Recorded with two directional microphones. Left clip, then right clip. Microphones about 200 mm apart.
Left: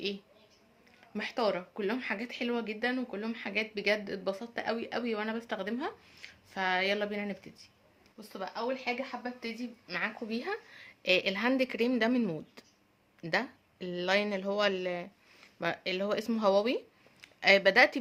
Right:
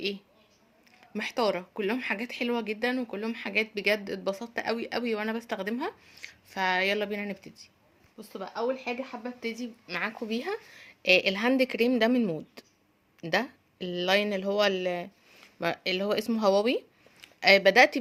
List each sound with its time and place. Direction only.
1.1 s speech: 30° right (ahead or behind)
8.2 s speech: 35° right (ahead or behind)